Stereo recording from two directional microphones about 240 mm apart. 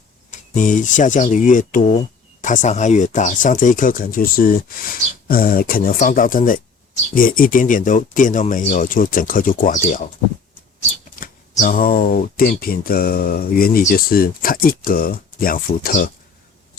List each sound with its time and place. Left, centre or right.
0.3 s speech: left
11.2 s speech: left